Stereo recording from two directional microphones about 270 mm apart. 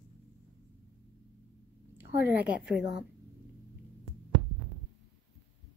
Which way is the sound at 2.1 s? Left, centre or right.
Centre.